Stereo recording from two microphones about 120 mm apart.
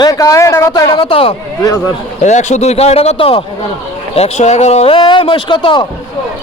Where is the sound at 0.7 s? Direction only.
40° left (ahead or behind).